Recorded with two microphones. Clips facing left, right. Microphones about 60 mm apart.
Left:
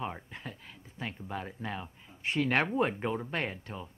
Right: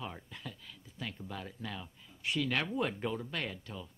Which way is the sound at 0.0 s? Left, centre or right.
Left.